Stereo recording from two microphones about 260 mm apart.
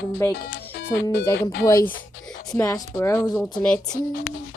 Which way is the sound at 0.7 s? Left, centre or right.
Left.